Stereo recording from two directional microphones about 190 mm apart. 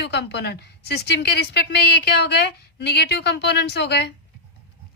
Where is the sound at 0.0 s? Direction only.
60° left (ahead or behind).